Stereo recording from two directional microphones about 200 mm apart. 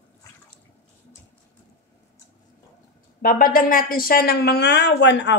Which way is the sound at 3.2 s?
45° left (ahead or behind).